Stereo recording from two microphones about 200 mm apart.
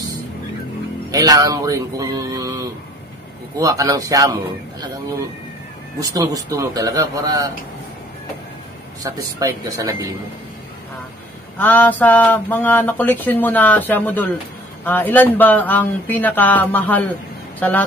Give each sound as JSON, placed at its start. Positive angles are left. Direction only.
{"t": 1.1, "sound": "a man's voice", "side_deg": -20}
{"t": 5.9, "sound": "speech", "side_deg": -15}
{"t": 9.0, "sound": "a man's voice", "side_deg": -20}
{"t": 11.5, "sound": "a sound", "side_deg": 10}
{"t": 17.6, "sound": "speech", "side_deg": 10}